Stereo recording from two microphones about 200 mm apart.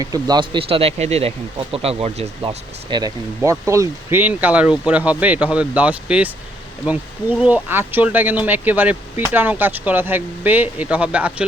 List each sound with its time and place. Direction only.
0.0 s speech: 20° right (ahead or behind)